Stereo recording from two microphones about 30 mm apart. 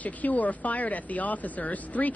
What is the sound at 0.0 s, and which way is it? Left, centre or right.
Speech, left.